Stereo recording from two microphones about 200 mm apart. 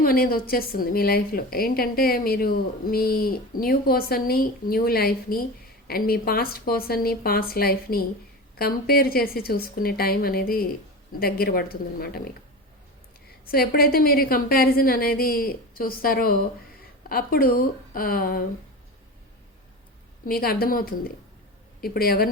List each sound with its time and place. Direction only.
0.0 s a woman's voice: 50° left (ahead or behind)
13.5 s a woman's voice: 50° left (ahead or behind)
20.2 s a woman's voice: 50° left (ahead or behind)